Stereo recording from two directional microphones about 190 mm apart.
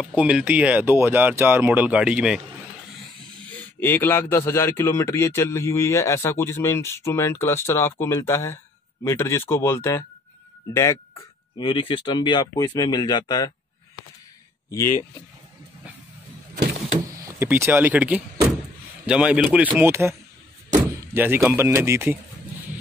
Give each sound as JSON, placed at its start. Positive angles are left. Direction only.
{"t": 0.0, "sound": "speech", "side_deg": -5}
{"t": 3.8, "sound": "a man's voice", "side_deg": 10}
{"t": 14.7, "sound": "a man's voice", "side_deg": 15}
{"t": 17.2, "sound": "speech", "side_deg": -15}